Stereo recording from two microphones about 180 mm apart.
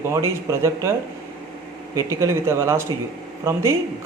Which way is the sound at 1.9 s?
15° right (ahead or behind).